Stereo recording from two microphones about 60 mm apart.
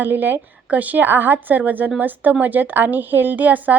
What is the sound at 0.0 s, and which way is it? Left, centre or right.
A woman's voice, right.